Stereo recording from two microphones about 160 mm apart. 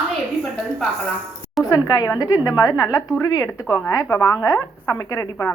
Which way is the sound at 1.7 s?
25° left (ahead or behind).